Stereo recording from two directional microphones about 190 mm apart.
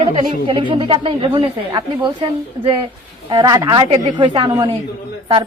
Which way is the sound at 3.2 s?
20° right (ahead or behind).